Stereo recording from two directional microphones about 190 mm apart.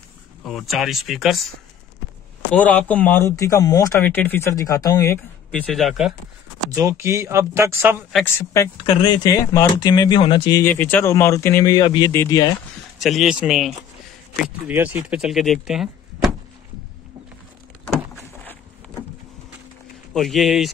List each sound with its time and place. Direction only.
0.5 s speech: centre (ahead or behind)
2.5 s speech: 5° left (ahead or behind)
6.7 s speech: 15° right (ahead or behind)
8.7 s speech: 25° left (ahead or behind)
10.6 s speech: 10° left (ahead or behind)
13.0 s speech: centre (ahead or behind)
17.8 s a sound: 10° left (ahead or behind)
20.2 s speech: centre (ahead or behind)